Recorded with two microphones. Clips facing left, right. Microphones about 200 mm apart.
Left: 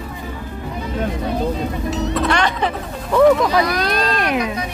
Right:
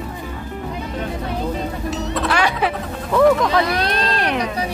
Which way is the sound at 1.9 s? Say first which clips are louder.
Left 3 dB; centre (ahead or behind).